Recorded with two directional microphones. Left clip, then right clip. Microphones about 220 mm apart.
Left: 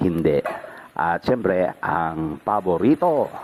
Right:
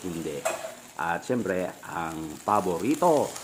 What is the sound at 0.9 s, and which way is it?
Speech, 30° left (ahead or behind).